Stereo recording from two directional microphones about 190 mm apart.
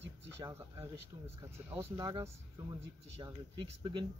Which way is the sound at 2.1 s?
25° right (ahead or behind).